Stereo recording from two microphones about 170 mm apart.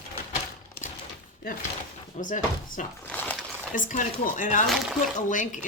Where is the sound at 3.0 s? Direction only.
10° left (ahead or behind).